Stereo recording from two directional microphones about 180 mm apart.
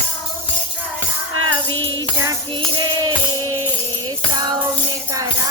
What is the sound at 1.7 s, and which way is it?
Music, 90° right.